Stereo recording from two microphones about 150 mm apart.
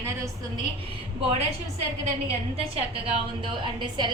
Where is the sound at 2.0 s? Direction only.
40° right (ahead or behind).